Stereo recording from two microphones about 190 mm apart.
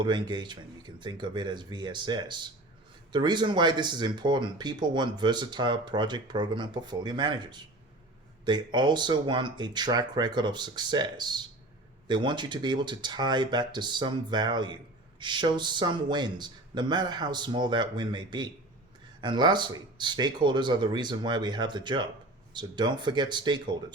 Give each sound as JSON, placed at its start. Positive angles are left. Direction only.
{"t": 0.0, "sound": "speech", "side_deg": -25}